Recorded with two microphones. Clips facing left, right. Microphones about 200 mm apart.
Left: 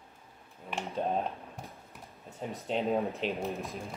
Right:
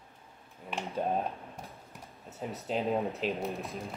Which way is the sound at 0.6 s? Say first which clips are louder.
Even; centre (ahead or behind).